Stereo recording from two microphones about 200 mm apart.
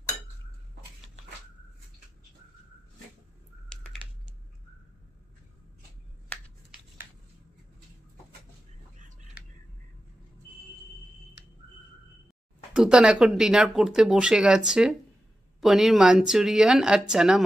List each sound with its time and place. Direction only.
3.6 s typing: 5° left (ahead or behind)
12.7 s speech: 5° right (ahead or behind)